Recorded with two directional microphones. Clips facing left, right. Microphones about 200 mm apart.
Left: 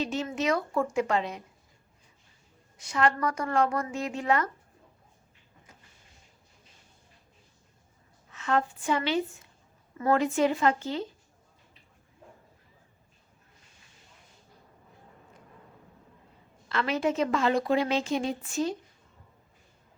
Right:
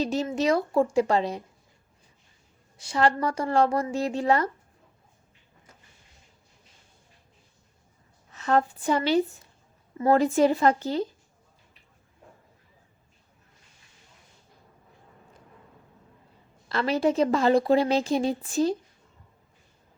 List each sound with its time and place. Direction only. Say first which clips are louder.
0.0 s a woman's voice: right 4 dB; 35° right (ahead or behind)
2.7 s a woman's voice: right 3 dB; 30° right (ahead or behind)
8.3 s a woman's voice: right 4 dB; 40° right (ahead or behind)
16.6 s a woman's voice: right 4 dB; 35° right (ahead or behind)